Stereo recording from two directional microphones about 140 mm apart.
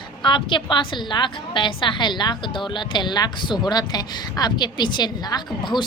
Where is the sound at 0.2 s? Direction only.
35° left (ahead or behind).